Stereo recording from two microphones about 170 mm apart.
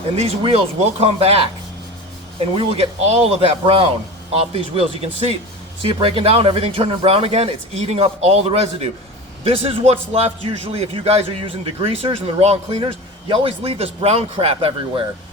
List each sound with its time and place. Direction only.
0.2 s a man's voice: 35° right (ahead or behind)
2.6 s a man's voice: 35° right (ahead or behind)